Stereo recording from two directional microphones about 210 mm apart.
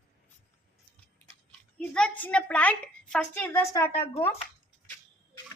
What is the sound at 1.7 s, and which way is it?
A woman's voice, 5° left (ahead or behind).